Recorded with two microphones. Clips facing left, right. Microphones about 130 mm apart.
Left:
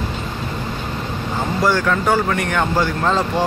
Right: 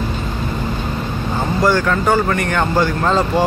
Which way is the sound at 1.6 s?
Centre (ahead or behind).